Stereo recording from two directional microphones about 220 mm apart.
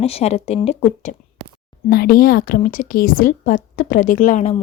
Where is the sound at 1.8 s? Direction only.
45° left (ahead or behind).